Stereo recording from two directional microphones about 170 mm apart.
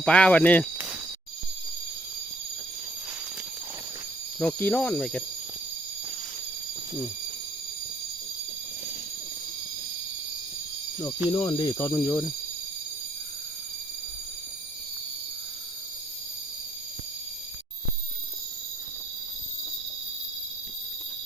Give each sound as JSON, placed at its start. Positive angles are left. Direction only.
{"t": 0.0, "sound": "speech", "side_deg": 5}
{"t": 4.4, "sound": "speech", "side_deg": 5}
{"t": 11.3, "sound": "speech", "side_deg": 25}